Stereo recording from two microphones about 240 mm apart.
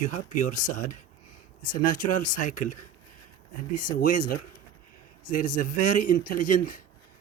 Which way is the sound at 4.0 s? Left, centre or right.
Left.